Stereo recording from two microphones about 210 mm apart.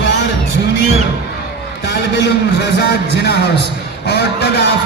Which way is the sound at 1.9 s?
55° left (ahead or behind).